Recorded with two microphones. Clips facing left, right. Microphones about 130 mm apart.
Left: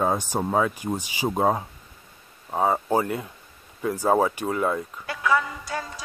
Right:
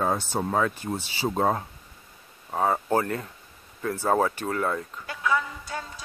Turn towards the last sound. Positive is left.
turn(degrees=90)